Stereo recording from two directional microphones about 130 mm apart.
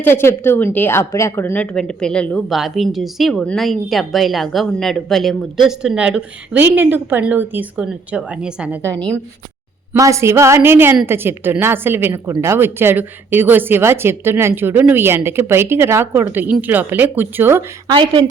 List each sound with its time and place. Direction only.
0.0 s a woman's voice: 15° left (ahead or behind)
2.5 s speech: centre (ahead or behind)
9.9 s a woman's voice: 25° right (ahead or behind)
17.9 s a woman's voice: 35° right (ahead or behind)